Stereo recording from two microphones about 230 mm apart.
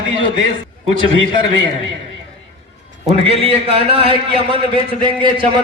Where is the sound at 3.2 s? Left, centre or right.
Right.